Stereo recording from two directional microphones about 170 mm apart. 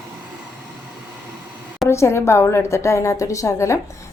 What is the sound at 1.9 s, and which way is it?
A woman's voice, 15° left (ahead or behind).